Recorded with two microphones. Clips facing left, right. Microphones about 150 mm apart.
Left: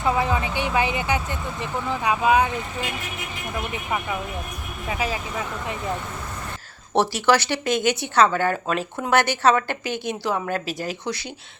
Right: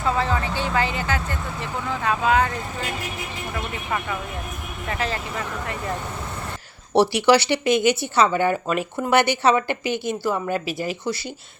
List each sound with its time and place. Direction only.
0.0 s a sound: 15° left (ahead or behind)
1.9 s speech: 15° left (ahead or behind)
3.5 s speech: 15° left (ahead or behind)
6.9 s speech: 15° right (ahead or behind)
9.8 s speech: 50° right (ahead or behind)
10.4 s speech: 10° right (ahead or behind)